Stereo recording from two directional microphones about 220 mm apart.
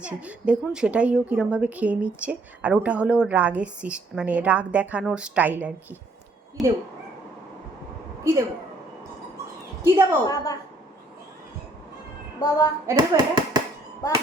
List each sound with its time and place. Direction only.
0.0 s a woman's voice: 5° right (ahead or behind)
8.2 s speech: 10° right (ahead or behind)
9.8 s a woman's voice: 10° right (ahead or behind)
10.2 s a woman's voice: 15° left (ahead or behind)
12.5 s a woman's voice: 15° left (ahead or behind)
12.9 s speech: 20° right (ahead or behind)